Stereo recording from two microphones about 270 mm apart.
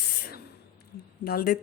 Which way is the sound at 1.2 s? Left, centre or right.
Left.